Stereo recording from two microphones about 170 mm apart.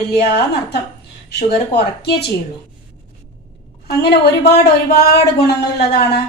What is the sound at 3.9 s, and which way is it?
Speech, 75° left (ahead or behind).